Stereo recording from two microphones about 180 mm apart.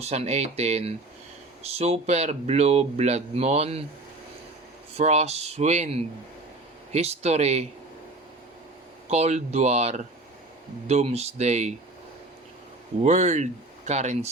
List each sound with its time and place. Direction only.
0.0 s speech: 35° right (ahead or behind)
4.9 s speech: 35° right (ahead or behind)
9.0 s speech: 35° right (ahead or behind)
13.0 s speech: 40° right (ahead or behind)